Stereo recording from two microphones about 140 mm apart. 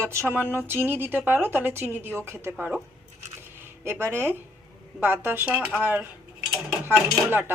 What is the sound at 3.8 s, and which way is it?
Speech, 20° right (ahead or behind).